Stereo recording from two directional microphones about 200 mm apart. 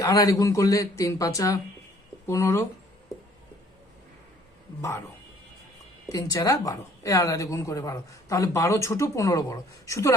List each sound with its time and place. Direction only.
0.0 s a woman's voice: 15° left (ahead or behind)
4.8 s a woman's voice: 15° left (ahead or behind)
6.1 s a woman's voice: 15° left (ahead or behind)